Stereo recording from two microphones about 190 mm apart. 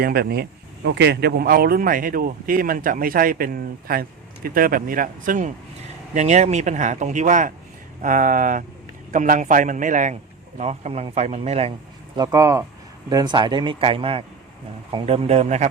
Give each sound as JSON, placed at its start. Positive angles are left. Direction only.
{"t": 0.0, "sound": "speech", "side_deg": -55}
{"t": 12.1, "sound": "speech", "side_deg": -20}